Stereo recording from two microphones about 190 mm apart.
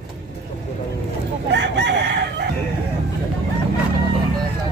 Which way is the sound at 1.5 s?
65° right (ahead or behind).